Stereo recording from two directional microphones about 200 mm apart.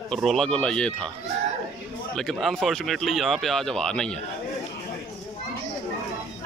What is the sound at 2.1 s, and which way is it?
Speech, centre (ahead or behind).